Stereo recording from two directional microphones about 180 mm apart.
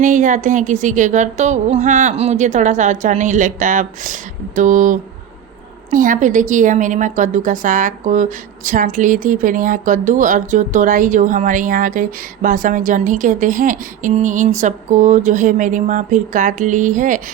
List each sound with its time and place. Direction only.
0.0 s a woman's voice: 45° right (ahead or behind)